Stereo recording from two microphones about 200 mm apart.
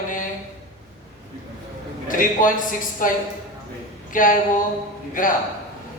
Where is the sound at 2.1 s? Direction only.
40° left (ahead or behind).